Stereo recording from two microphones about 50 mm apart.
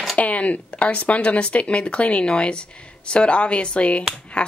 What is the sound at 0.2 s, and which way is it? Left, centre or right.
Speech, left.